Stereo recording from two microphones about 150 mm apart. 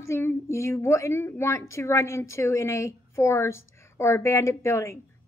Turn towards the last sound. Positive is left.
turn(degrees=20)  # may be behind; listen again after turning